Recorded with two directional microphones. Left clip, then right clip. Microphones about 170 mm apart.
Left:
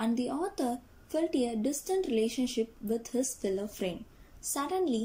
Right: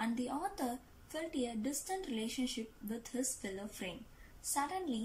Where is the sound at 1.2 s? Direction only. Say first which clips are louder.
Left 7 dB; 20° left (ahead or behind).